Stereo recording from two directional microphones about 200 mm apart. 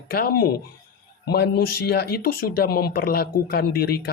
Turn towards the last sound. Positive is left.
turn(degrees=50)  # may be behind; listen again after turning